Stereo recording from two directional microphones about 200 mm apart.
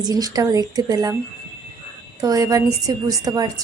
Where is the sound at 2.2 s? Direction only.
15° right (ahead or behind).